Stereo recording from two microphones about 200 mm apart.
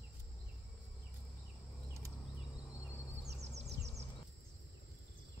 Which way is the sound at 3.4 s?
35° right (ahead or behind).